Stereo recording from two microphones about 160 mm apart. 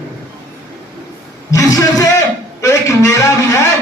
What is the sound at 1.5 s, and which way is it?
A man's voice, 20° left (ahead or behind).